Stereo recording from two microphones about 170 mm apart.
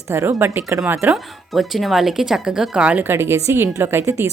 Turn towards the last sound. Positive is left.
turn(degrees=-15)  # may be behind; listen again after turning